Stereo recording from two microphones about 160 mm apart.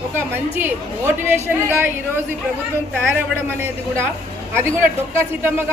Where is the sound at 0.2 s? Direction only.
15° right (ahead or behind).